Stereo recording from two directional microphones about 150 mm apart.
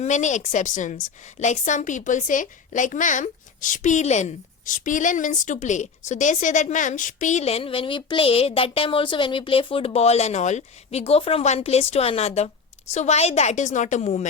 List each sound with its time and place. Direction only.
0.0 s a woman's voice: 50° left (ahead or behind)